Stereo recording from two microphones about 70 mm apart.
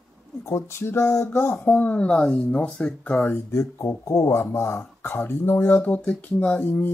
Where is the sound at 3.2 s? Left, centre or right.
Left.